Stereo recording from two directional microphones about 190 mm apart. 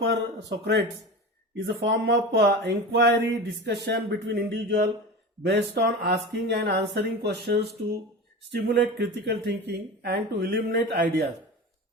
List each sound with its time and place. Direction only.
0.0 s speech: 65° right (ahead or behind)